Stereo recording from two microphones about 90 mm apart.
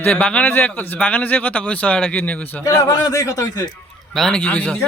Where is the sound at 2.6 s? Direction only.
40° left (ahead or behind).